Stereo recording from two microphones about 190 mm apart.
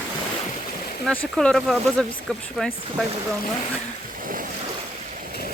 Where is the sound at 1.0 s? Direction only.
5° left (ahead or behind).